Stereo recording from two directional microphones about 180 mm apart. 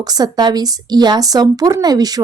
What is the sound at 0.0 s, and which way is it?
Speech, 20° right (ahead or behind).